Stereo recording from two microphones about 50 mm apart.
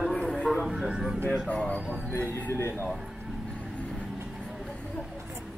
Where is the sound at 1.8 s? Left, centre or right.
Right.